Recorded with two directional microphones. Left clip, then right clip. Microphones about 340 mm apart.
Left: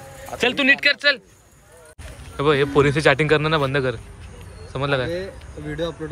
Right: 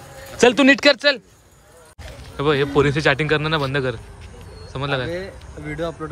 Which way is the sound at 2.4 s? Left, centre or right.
Centre.